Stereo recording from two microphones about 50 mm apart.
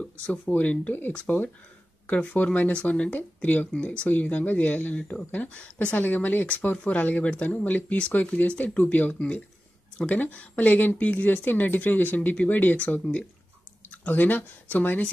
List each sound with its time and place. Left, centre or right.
0.0 s speech: left